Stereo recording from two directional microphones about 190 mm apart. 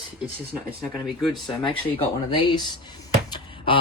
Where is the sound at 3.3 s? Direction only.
25° left (ahead or behind).